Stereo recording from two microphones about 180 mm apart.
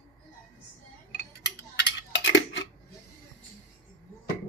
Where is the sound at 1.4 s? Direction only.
80° left.